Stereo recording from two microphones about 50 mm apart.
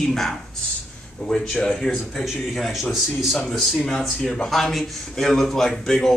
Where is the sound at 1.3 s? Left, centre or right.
Centre.